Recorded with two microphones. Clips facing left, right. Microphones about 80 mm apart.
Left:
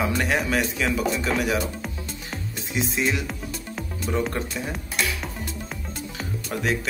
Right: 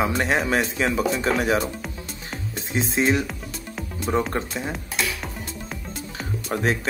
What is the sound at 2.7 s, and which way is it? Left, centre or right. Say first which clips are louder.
Speech: right 4 dB; right.